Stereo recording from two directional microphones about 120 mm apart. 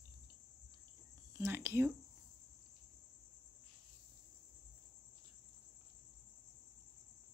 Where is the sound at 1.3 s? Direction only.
25° right (ahead or behind).